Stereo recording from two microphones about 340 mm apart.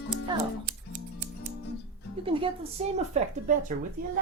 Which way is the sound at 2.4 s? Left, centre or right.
Centre.